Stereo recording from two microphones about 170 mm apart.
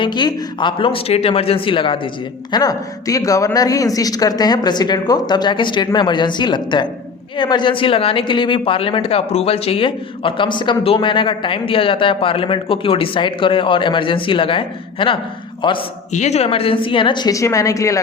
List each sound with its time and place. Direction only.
0.0 s speech: 25° left (ahead or behind)
16.1 s speech: 40° left (ahead or behind); by 18.0 s 20° left (ahead or behind)